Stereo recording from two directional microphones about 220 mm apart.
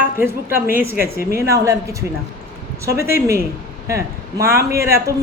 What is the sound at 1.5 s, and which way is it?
Speech, 15° right (ahead or behind).